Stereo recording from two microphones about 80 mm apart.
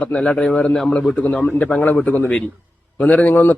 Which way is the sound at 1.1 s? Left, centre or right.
Centre.